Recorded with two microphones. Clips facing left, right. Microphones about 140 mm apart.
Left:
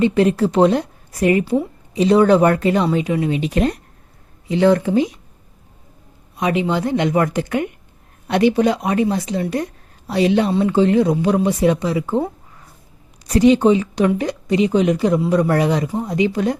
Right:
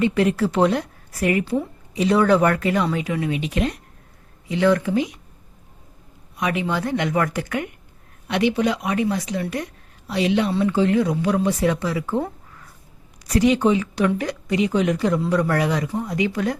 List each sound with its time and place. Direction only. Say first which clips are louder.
0.0 s speech: left 4 dB; 25° left (ahead or behind)
4.4 s speech: left 4 dB; 30° left (ahead or behind)
6.3 s speech: left 5 dB; 25° left (ahead or behind)
8.3 s a woman's voice: left 5 dB; 40° left (ahead or behind)
10.6 s speech: left 4 dB; 25° left (ahead or behind)